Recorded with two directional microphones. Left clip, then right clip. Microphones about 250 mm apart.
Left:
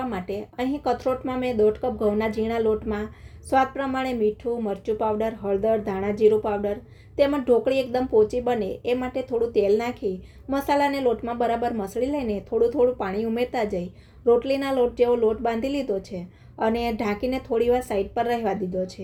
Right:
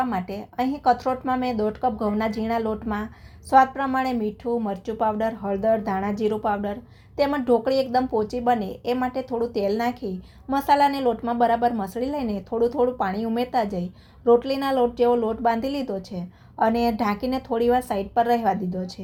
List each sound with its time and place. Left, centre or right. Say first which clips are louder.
0.1 s a woman's voice: right 1 dB; right